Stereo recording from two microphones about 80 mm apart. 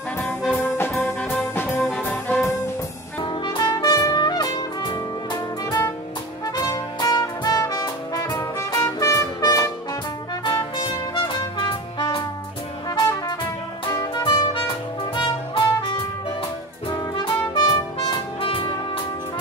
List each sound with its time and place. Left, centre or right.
0.5 s music: left
3.3 s trumpet: left
6.6 s brass instrument: left
8.4 s music: left
10.4 s music: left
14.1 s music: left
17.2 s trumpet: left